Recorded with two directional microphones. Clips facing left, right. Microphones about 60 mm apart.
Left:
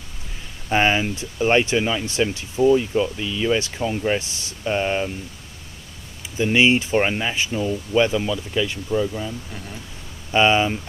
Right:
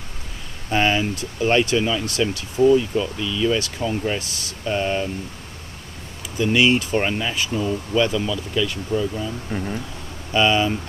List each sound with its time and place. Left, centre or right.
0.7 s speech: left
6.3 s speech: left
9.5 s speech: right
10.3 s speech: left